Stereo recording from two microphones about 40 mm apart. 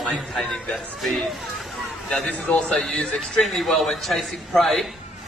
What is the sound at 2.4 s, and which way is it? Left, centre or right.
A man's voice, centre.